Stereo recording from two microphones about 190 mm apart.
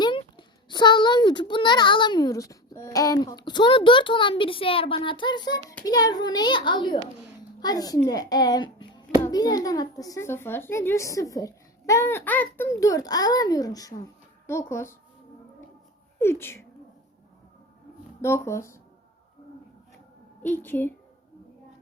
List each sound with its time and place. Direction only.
0.0 s a child's voice: 25° left (ahead or behind)
16.1 s speech: 15° left (ahead or behind)
18.2 s a child's voice: 15° left (ahead or behind)
20.4 s a child's voice: 10° left (ahead or behind)